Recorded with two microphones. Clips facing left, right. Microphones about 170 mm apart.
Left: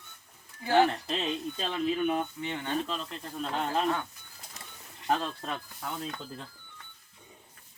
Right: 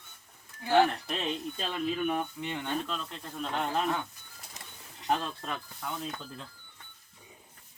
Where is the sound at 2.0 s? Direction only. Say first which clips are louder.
Left 2 dB; 15° left (ahead or behind).